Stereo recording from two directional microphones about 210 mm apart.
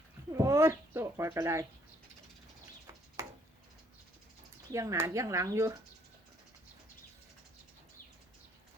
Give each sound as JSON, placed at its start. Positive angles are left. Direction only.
{"t": 0.3, "sound": "speech", "side_deg": -15}
{"t": 3.2, "sound": "a sound", "side_deg": -15}
{"t": 4.7, "sound": "speech", "side_deg": -15}